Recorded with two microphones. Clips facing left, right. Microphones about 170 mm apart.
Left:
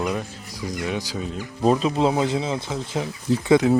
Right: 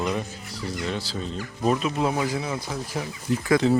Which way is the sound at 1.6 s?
30° left (ahead or behind).